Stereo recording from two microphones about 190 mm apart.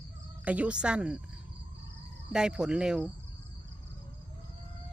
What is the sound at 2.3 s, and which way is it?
Speech, 5° right (ahead or behind).